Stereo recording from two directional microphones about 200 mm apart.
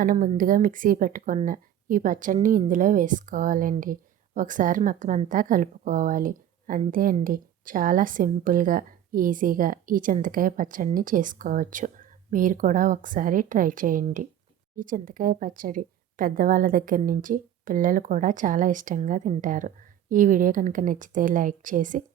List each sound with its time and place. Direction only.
0.0 s a woman's voice: 45° right (ahead or behind)